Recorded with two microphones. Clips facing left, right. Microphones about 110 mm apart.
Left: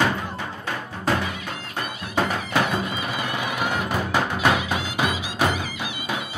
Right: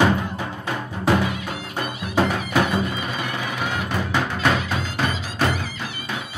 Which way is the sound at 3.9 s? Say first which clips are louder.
Even; 10° left (ahead or behind).